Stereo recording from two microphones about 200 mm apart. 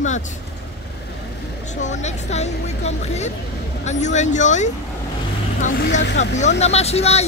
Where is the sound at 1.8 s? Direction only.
35° left (ahead or behind).